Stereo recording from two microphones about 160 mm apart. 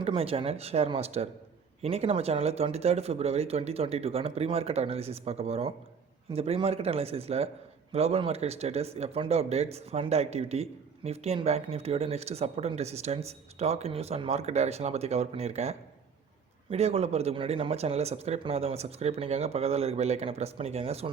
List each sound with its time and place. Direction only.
0.0 s speech: 35° right (ahead or behind)